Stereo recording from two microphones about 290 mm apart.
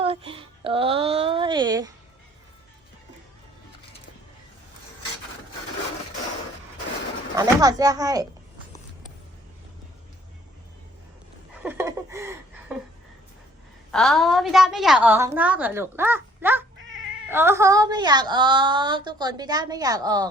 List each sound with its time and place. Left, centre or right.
0.0 s speech: centre
7.3 s a woman's voice: centre
11.6 s a sound: centre
13.9 s a woman's voice: centre
16.7 s cat: right
17.2 s a woman's voice: centre